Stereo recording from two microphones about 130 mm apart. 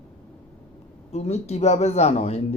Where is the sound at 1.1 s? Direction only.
55° left (ahead or behind).